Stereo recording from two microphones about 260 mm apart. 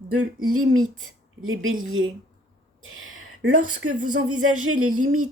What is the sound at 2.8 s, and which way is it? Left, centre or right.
Speech, right.